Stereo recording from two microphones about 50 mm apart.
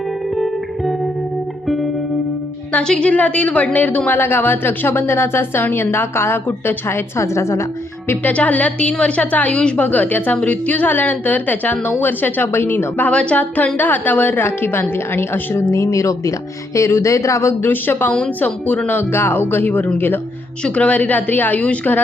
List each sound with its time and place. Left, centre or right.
0.3 s music: centre
2.8 s a woman's voice: centre; by 4.2 s left
4.2 s a woman's voice: left
8.2 s a woman's voice: left
9.8 s a woman's voice: left
13.1 s a woman's voice: left
17.6 s a woman's voice: left
18.9 s a woman's voice: left
20.7 s a woman's voice: left